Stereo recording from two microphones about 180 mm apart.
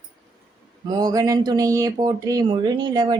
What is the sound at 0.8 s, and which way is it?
Speech, 20° right (ahead or behind).